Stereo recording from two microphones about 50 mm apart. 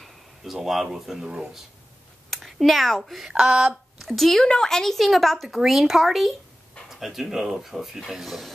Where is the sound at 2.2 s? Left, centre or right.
Centre.